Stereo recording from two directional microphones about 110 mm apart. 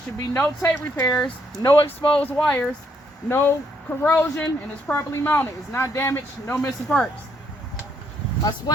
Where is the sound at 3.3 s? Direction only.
20° left (ahead or behind).